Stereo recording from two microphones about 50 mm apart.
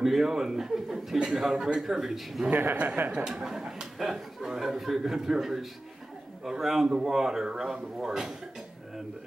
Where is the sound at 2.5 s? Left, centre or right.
Right.